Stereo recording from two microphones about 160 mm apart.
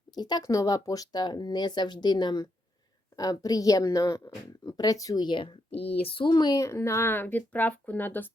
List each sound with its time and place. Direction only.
0.1 s speech: 25° left (ahead or behind)
5.7 s speech: 90° left
6.0 s speech: 35° left (ahead or behind); by 8.3 s 10° left (ahead or behind)